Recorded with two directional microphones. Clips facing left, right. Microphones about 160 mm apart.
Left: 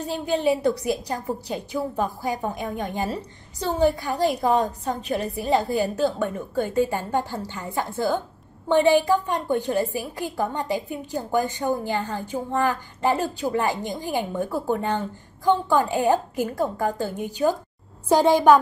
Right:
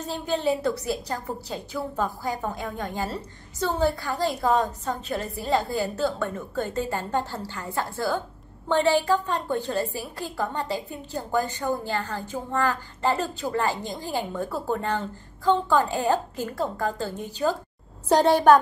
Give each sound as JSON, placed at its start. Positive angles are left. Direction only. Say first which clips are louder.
{"t": 0.0, "sound": "a woman's voice", "louder": "left 3 dB", "side_deg": 15}